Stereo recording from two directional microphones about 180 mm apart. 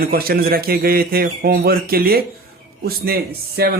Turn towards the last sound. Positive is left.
turn(degrees=-60)  # may be behind; listen again after turning